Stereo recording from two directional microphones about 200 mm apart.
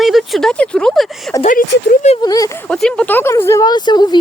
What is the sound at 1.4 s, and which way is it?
Speech, 40° left (ahead or behind).